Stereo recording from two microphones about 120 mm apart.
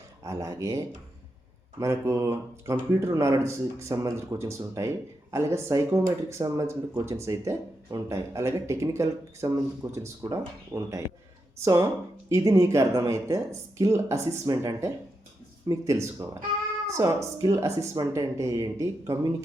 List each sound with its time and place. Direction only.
0.3 s speech: 25° right (ahead or behind)